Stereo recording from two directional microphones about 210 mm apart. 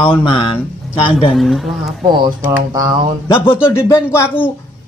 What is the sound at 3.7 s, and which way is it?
Speech, 10° left (ahead or behind).